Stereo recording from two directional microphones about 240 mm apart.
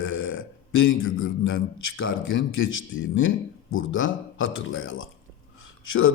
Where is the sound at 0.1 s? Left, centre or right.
Left.